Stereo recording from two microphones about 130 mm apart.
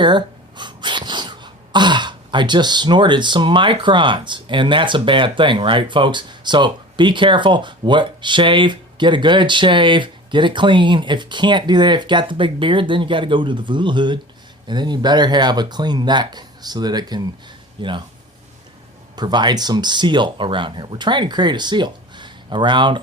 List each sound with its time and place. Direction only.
0.0 s speech: 35° right (ahead or behind)
19.1 s speech: 35° right (ahead or behind)